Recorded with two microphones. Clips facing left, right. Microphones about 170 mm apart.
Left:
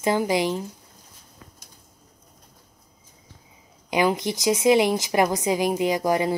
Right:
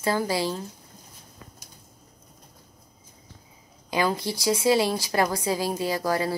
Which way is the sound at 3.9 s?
20° left (ahead or behind).